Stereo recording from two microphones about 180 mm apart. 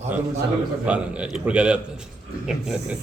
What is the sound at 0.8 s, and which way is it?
A man's voice, 5° right (ahead or behind).